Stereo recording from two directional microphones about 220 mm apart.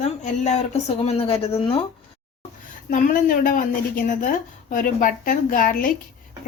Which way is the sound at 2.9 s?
35° left (ahead or behind).